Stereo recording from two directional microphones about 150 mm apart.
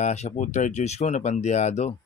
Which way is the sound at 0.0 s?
50° left (ahead or behind).